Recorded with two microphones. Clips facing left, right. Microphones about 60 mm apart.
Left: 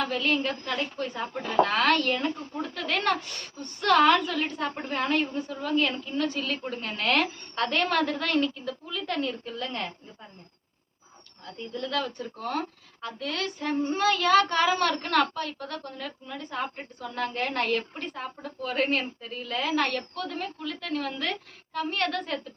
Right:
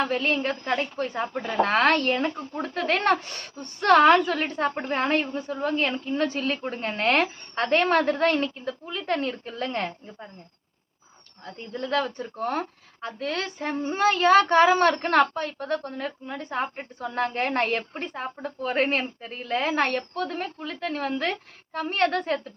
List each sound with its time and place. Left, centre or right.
0.0 s speech: right
11.4 s speech: right